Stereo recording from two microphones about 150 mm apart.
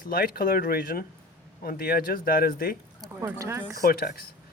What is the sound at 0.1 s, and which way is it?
Speech, 90° left.